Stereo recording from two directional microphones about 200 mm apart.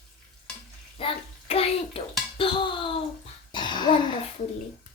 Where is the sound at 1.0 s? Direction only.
30° left (ahead or behind).